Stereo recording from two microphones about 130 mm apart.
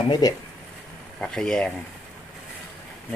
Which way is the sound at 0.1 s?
30° left (ahead or behind).